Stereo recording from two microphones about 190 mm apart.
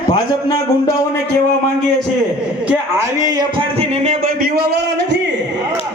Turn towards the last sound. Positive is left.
turn(degrees=-60)  # may be behind; listen again after turning